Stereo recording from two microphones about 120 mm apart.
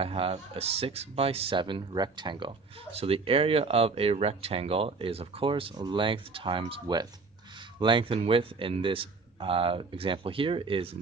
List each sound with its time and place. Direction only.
0.0 s speech: 50° right (ahead or behind)
3.0 s speech: 50° right (ahead or behind)